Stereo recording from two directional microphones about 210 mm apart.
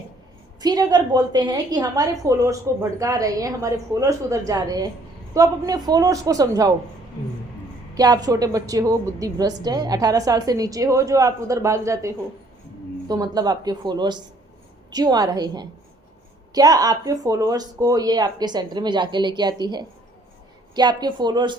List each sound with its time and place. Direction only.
0.6 s a woman's voice: 20° right (ahead or behind)
7.9 s a woman's voice: 20° right (ahead or behind)